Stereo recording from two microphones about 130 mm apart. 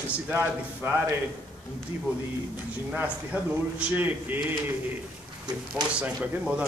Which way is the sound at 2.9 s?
10° right (ahead or behind).